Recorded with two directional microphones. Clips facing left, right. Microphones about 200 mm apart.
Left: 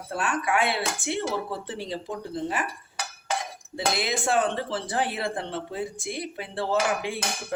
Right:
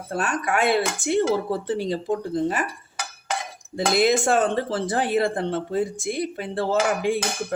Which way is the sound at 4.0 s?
45° right (ahead or behind).